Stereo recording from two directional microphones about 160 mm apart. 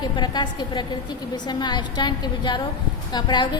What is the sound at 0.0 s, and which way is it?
A woman's voice, 25° left (ahead or behind).